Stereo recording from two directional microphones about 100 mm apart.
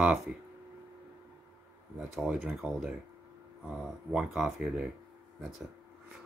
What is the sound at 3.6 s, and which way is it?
Speech, 5° right (ahead or behind).